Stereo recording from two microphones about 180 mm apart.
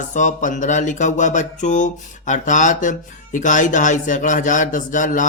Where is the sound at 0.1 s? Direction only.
45° left (ahead or behind).